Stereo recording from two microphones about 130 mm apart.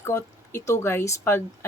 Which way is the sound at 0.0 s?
20° left (ahead or behind).